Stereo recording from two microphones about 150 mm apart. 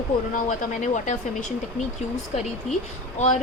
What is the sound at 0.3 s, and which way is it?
A woman's voice, 60° left (ahead or behind).